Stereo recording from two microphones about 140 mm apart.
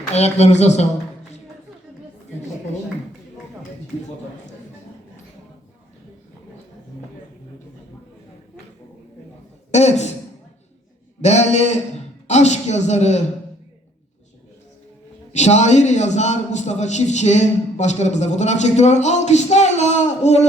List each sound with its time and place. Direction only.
0.0 s speech: 50° left (ahead or behind)
9.7 s a man's voice: 55° left (ahead or behind)
11.2 s a man's voice: 55° left (ahead or behind)
15.3 s a man's voice: 55° left (ahead or behind)